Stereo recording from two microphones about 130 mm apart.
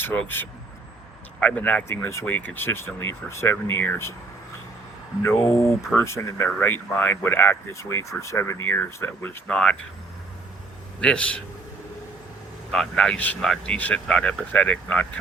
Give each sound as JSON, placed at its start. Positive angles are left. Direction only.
{"t": 0.0, "sound": "speech", "side_deg": 15}
{"t": 5.2, "sound": "speech", "side_deg": 20}
{"t": 11.0, "sound": "speech", "side_deg": 10}
{"t": 12.7, "sound": "speech", "side_deg": 5}